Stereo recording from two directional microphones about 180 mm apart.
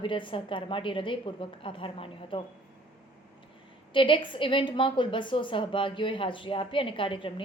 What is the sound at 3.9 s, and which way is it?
A woman's voice, 25° left (ahead or behind).